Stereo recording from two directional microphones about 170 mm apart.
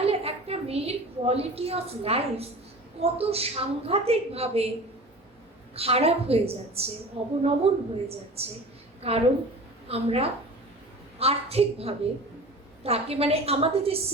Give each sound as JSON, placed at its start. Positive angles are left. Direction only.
{"t": 0.0, "sound": "a woman's voice", "side_deg": -35}
{"t": 5.7, "sound": "a woman's voice", "side_deg": -35}